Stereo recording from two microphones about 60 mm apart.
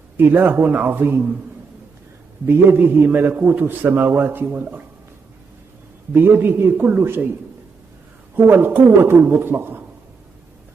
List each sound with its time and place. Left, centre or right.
0.2 s a man's voice: right
2.4 s a man's voice: right
6.1 s a man's voice: right
8.4 s a man's voice: right